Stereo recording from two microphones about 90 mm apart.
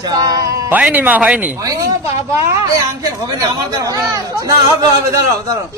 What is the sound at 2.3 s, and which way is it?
Speech, 35° right (ahead or behind).